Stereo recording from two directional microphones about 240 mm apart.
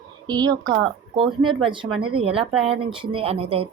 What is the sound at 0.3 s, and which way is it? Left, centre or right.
A woman's voice, centre.